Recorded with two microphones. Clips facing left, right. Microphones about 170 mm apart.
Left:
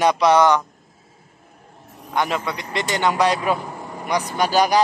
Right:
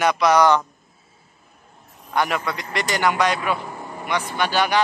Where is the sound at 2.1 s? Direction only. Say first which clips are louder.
Even; 20° left (ahead or behind).